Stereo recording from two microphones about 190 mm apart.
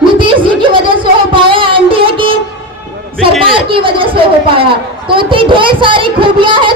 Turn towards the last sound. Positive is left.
turn(degrees=-25)  # may be behind; listen again after turning